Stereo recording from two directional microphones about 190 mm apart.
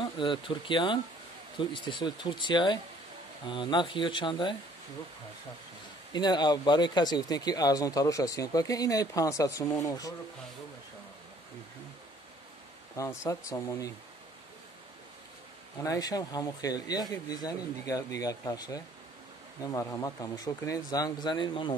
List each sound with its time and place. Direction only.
0.0 s speech: 25° left (ahead or behind)
6.1 s speech: 20° left (ahead or behind)
12.9 s speech: 15° left (ahead or behind)
15.8 s speech: 20° left (ahead or behind)